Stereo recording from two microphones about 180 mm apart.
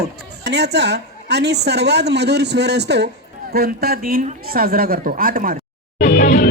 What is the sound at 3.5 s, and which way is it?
A woman's voice, 60° right (ahead or behind).